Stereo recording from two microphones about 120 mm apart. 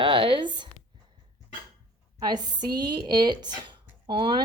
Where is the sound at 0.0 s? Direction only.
45° right (ahead or behind).